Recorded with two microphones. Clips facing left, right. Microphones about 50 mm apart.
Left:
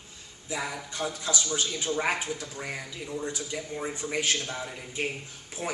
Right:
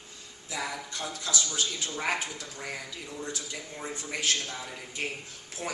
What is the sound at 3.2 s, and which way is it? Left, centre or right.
Speech, left.